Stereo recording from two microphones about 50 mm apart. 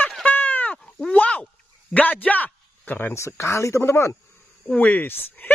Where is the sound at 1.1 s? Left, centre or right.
Left.